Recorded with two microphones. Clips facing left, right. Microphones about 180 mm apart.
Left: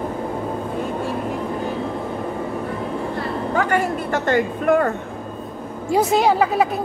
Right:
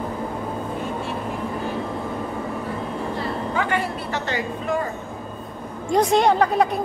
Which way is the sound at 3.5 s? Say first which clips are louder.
Left 6 dB; 45° left (ahead or behind).